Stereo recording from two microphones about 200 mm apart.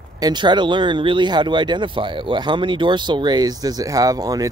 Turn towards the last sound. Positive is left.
turn(degrees=-15)  # may be behind; listen again after turning